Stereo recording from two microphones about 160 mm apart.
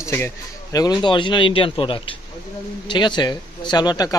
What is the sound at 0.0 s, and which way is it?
Speech, 15° left (ahead or behind).